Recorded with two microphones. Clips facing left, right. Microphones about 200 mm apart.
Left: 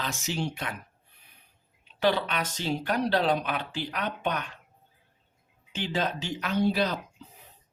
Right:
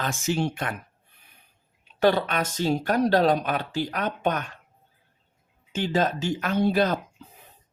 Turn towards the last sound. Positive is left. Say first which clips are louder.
# right 4 dB
turn(degrees=-50)  # may be behind; listen again after turning